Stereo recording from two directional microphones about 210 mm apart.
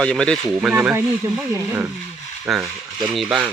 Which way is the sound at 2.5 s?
Centre (ahead or behind).